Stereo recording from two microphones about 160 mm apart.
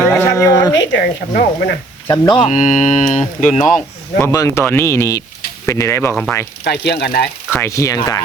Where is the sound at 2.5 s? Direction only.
50° left (ahead or behind).